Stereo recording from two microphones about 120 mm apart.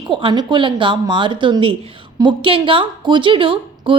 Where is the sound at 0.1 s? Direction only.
45° right (ahead or behind).